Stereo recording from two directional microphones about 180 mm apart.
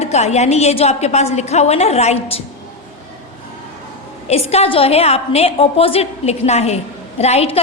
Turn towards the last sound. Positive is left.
turn(degrees=35)  # may be behind; listen again after turning